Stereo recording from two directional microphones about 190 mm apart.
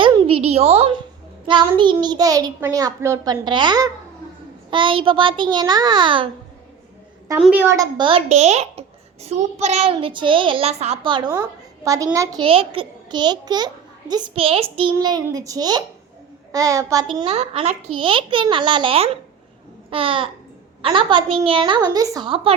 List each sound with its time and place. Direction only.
0.0 s a woman's voice: 25° right (ahead or behind)
7.3 s a child's voice: 5° right (ahead or behind); by 22.5 s 25° right (ahead or behind)